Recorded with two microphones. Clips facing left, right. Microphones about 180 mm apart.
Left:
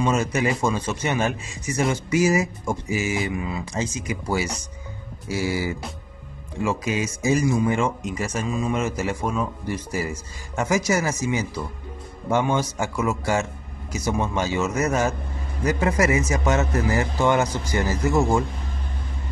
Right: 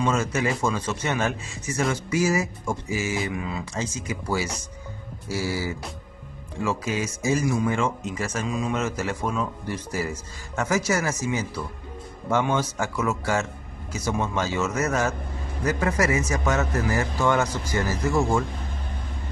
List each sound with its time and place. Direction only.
0.0 s a man's voice: 15° left (ahead or behind)
3.2 s a man's voice: 5° left (ahead or behind)